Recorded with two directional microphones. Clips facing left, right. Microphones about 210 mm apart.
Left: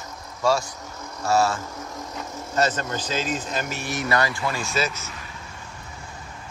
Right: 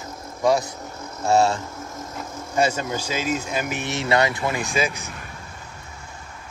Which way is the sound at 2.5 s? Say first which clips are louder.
Right 2 dB; 10° right (ahead or behind).